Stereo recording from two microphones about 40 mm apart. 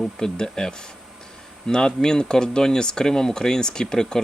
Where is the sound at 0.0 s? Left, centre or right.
Centre.